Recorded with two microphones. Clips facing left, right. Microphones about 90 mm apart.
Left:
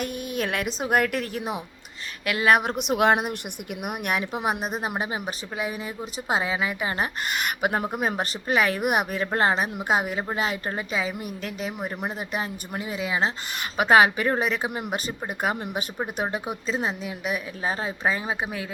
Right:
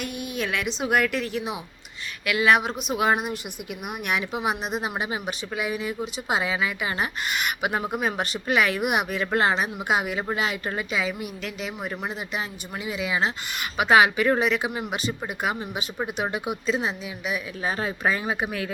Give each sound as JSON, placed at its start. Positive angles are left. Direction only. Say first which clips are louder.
{"t": 0.0, "sound": "a woman's voice", "louder": "left 2 dB", "side_deg": 45}
{"t": 2.7, "sound": "speech", "louder": "left 3 dB", "side_deg": 70}
{"t": 3.2, "sound": "a woman's voice", "louder": "even", "side_deg": 50}
{"t": 5.5, "sound": "a woman's voice", "louder": "right 3 dB", "side_deg": 40}
{"t": 17.6, "sound": "speech", "louder": "right 1 dB", "side_deg": 30}